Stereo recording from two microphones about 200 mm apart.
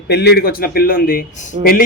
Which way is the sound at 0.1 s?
55° left (ahead or behind).